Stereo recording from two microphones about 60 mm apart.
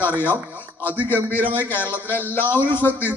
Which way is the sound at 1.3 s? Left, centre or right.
Right.